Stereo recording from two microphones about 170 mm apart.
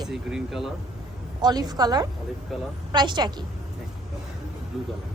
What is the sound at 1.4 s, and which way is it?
A woman's voice, 25° right (ahead or behind).